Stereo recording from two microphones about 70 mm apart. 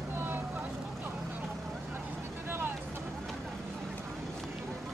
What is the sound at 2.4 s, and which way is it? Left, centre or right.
Vehicle, right.